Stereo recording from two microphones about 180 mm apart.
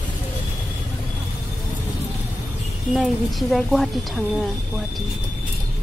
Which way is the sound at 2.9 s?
Centre (ahead or behind).